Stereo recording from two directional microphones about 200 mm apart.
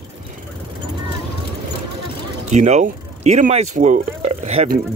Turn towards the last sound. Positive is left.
turn(degrees=-35)  # may be behind; listen again after turning